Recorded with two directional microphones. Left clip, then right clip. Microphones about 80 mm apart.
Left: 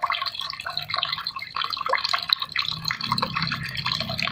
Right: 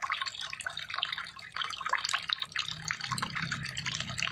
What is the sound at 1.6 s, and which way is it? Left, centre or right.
Drip, centre.